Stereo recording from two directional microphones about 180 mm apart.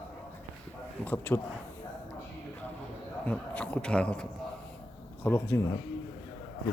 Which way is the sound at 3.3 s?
5° left (ahead or behind).